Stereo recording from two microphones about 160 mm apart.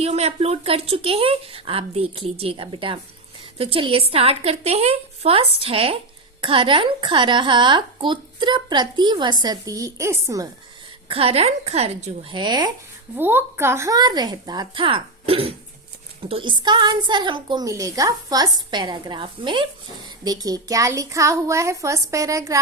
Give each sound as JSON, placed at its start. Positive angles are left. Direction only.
{"t": 0.0, "sound": "a woman's voice", "side_deg": -40}
{"t": 11.1, "sound": "a woman's voice", "side_deg": -35}
{"t": 12.3, "sound": "a woman's voice", "side_deg": -25}
{"t": 13.1, "sound": "a woman's voice", "side_deg": -15}